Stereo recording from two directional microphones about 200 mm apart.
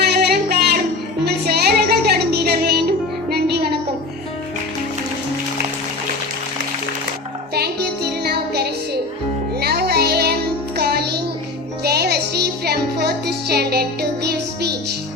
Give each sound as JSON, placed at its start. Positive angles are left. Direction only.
{"t": 0.0, "sound": "music", "side_deg": -50}
{"t": 7.5, "sound": "music", "side_deg": -50}